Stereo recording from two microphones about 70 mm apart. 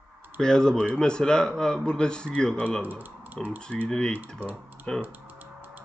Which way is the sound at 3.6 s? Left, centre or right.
Centre.